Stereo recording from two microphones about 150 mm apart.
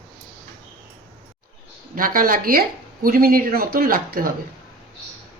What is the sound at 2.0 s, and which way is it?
A woman's voice, 70° right (ahead or behind).